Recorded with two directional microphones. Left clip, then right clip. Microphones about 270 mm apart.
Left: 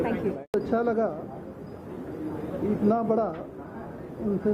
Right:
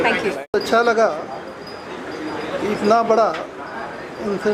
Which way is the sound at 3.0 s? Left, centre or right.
Centre.